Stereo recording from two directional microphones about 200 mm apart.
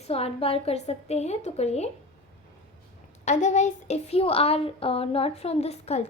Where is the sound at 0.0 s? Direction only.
30° left (ahead or behind).